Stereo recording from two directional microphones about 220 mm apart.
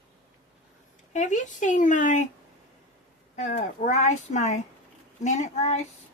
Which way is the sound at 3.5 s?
35° left (ahead or behind).